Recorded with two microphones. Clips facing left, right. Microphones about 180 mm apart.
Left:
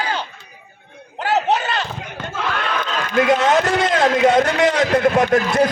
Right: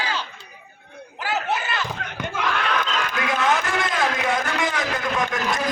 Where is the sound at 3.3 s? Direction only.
70° left (ahead or behind).